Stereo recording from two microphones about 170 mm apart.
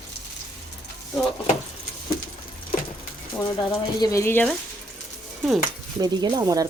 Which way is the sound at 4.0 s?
20° left (ahead or behind).